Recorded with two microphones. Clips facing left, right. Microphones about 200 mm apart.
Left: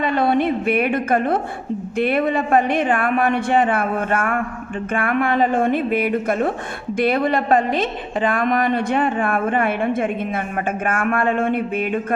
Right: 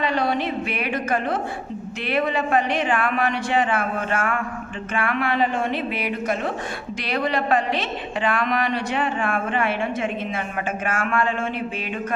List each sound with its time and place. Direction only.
0.0 s a woman's voice: 50° left (ahead or behind)